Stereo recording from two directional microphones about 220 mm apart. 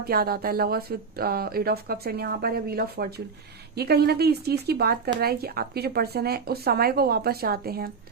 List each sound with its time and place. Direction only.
0.0 s speech: 45° right (ahead or behind)